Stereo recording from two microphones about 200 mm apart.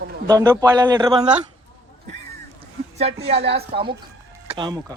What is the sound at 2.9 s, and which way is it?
A woman's voice, 30° right (ahead or behind).